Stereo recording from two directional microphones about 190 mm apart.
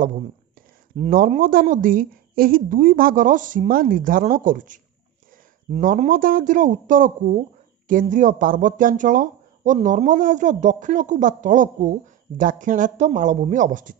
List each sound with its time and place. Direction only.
1.1 s speech: 45° right (ahead or behind)